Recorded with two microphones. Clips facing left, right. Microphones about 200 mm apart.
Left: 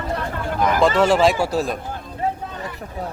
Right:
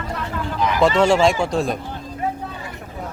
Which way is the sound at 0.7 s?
Centre (ahead or behind).